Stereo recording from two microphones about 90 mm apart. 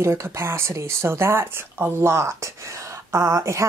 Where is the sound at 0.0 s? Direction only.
30° right (ahead or behind).